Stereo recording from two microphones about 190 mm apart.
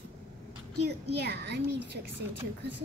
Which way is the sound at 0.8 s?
60° right (ahead or behind).